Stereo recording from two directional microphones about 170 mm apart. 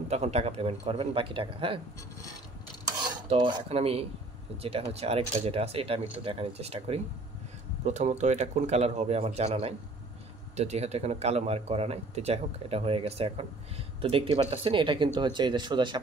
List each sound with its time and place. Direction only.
0.1 s speech: 40° right (ahead or behind)
3.3 s speech: 30° right (ahead or behind)